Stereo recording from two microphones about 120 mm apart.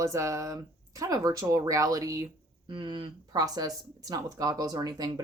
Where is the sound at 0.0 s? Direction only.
25° right (ahead or behind).